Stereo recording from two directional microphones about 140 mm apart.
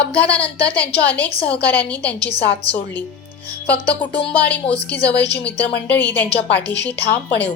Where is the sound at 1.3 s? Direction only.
45° left (ahead or behind).